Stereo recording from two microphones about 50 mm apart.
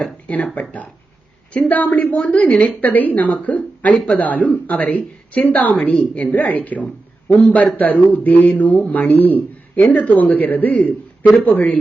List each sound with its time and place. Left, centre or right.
0.0 s a man's voice: left
3.9 s a man's voice: centre
4.2 s a man's voice: left